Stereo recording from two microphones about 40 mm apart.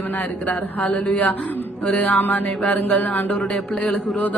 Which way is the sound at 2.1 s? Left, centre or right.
Left.